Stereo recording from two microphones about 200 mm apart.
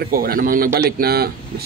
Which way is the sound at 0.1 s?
45° right (ahead or behind).